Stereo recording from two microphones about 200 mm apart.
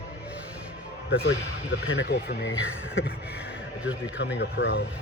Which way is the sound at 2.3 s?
55° left (ahead or behind).